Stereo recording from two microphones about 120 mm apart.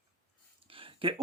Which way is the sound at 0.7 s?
50° right (ahead or behind).